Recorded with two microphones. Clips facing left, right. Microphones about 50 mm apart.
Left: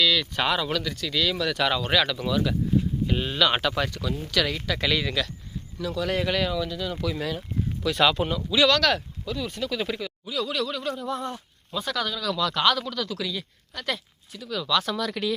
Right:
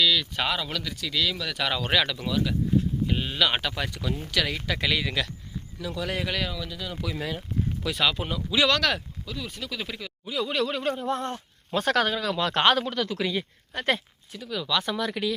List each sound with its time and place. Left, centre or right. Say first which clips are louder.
0.0 s speech: left 1 dB; centre
3.9 s speech: left 2 dB; centre
7.9 s speech: left 5 dB; centre
8.4 s speech: left 2 dB; right
8.9 s speech: left 4 dB; centre
10.2 s speech: right 1 dB; centre
10.5 s speech: right 2 dB; right
11.2 s speech: right 1 dB; centre
11.8 s speech: right 5 dB; right
12.0 s speech: right 1 dB; right
14.3 s speech: left 2 dB; centre